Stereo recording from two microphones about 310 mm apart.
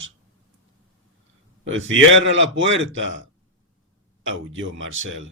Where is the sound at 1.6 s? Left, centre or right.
Right.